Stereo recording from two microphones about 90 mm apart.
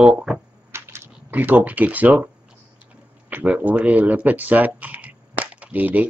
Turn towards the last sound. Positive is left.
turn(degrees=-15)  # may be behind; listen again after turning